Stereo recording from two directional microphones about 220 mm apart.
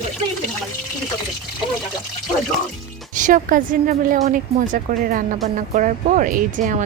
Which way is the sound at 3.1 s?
35° right (ahead or behind).